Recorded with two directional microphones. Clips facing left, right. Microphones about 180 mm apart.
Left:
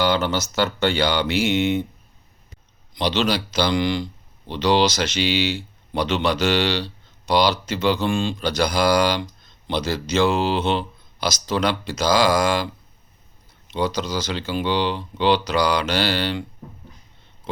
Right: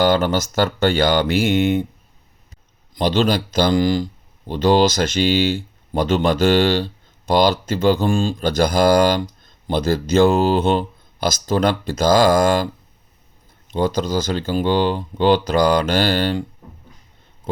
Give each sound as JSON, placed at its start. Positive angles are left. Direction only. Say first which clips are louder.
{"t": 0.0, "sound": "speech", "louder": "right 4 dB", "side_deg": -50}
{"t": 2.9, "sound": "speech", "louder": "right 4 dB", "side_deg": -45}
{"t": 13.7, "sound": "speech", "louder": "right 4 dB", "side_deg": -50}